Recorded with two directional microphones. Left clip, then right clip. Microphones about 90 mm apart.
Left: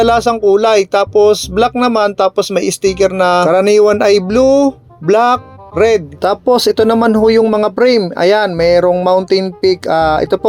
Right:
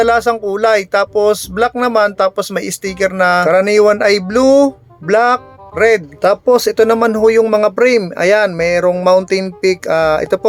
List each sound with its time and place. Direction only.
0.0 s speech: 25° left (ahead or behind)
3.5 s speech: 35° left (ahead or behind); by 10.4 s 10° left (ahead or behind)